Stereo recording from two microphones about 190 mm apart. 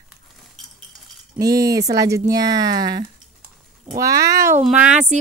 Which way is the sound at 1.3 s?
20° right (ahead or behind).